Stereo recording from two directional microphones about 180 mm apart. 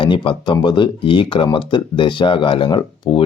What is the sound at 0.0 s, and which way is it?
Speech, 30° left (ahead or behind).